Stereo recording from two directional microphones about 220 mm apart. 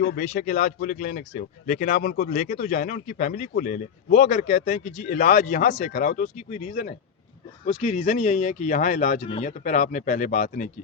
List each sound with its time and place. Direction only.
0.0 s speech: 40° left (ahead or behind)